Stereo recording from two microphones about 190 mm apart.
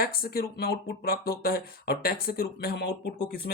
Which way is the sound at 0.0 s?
50° left (ahead or behind).